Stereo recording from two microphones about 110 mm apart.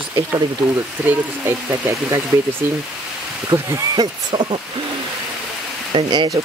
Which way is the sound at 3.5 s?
30° right (ahead or behind).